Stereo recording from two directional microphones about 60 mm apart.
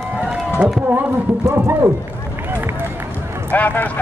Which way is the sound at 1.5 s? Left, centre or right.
Right.